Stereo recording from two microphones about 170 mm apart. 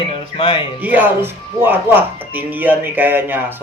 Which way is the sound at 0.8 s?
10° right (ahead or behind).